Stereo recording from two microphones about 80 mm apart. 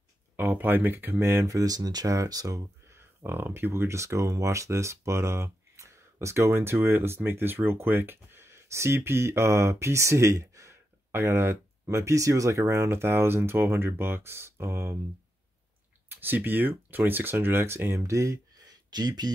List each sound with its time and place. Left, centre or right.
0.4 s speech: right
3.3 s speech: right
16.1 s speech: right
18.9 s speech: right